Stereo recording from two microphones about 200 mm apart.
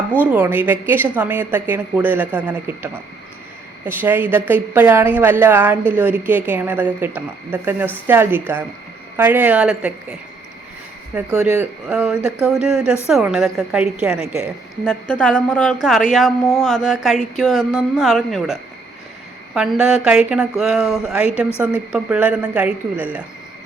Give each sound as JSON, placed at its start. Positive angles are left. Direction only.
{"t": 0.2, "sound": "a woman's voice", "side_deg": -10}
{"t": 11.1, "sound": "mantra", "side_deg": -5}
{"t": 21.6, "sound": "a woman's voice", "side_deg": -5}